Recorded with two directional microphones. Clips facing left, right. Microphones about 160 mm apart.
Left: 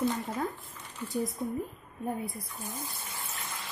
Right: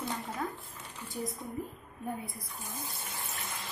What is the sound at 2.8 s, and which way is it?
Water, 15° right (ahead or behind).